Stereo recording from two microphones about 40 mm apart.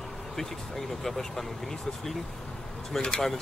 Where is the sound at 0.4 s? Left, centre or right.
Centre.